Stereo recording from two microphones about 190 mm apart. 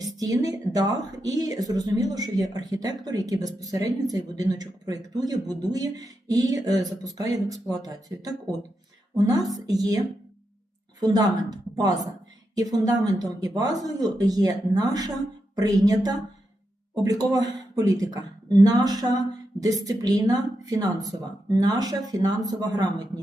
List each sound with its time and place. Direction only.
0.0 s a woman's voice: 20° right (ahead or behind)
11.0 s a woman's voice: 20° right (ahead or behind)